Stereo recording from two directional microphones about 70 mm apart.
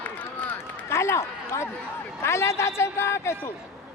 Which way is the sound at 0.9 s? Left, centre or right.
Left.